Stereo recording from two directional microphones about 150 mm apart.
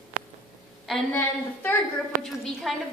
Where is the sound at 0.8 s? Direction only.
5° left (ahead or behind).